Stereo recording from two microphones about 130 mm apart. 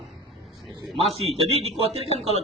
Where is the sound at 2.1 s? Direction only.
50° left (ahead or behind).